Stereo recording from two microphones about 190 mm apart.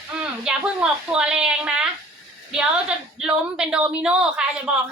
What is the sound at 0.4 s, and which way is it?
A woman's voice, 5° right (ahead or behind).